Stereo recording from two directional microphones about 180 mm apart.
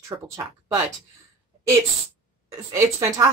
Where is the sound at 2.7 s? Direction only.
15° right (ahead or behind).